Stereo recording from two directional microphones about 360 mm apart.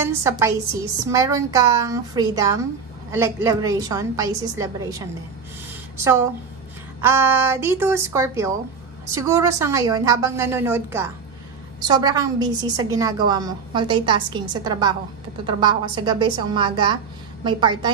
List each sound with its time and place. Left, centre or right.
0.0 s a woman's voice: centre
7.0 s a woman's voice: centre